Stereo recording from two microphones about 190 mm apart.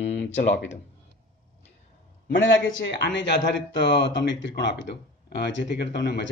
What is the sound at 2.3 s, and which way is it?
A man's voice, 85° left.